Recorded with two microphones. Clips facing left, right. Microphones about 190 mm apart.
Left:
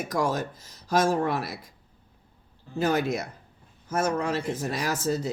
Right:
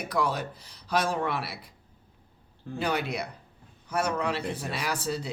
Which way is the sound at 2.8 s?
45° left (ahead or behind).